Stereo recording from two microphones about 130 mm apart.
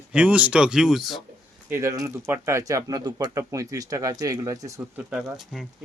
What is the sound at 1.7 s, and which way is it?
Speech, 20° right (ahead or behind).